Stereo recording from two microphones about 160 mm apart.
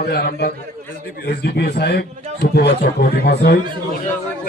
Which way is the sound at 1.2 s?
90° left.